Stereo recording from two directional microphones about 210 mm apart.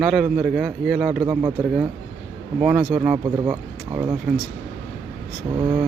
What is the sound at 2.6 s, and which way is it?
Speech, centre (ahead or behind).